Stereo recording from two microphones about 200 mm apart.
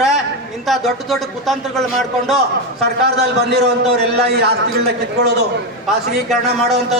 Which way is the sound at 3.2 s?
55° right (ahead or behind).